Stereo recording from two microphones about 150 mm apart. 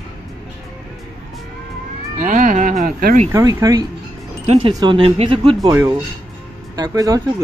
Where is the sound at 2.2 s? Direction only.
60° right (ahead or behind).